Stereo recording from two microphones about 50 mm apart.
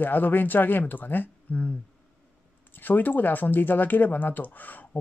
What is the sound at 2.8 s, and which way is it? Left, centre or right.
Speech, left.